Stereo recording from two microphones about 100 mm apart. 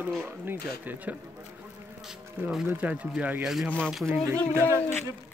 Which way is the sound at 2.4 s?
20° right (ahead or behind).